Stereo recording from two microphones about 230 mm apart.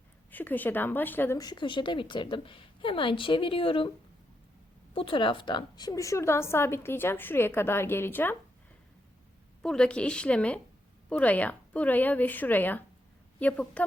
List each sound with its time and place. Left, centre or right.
0.3 s a woman's voice: centre; by 3.9 s left
4.9 s a woman's voice: left
9.6 s a woman's voice: centre